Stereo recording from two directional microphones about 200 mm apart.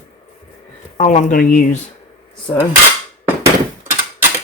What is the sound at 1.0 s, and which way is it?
Speech, 35° left (ahead or behind).